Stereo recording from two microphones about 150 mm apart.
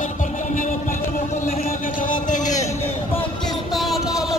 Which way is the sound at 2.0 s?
60° left (ahead or behind).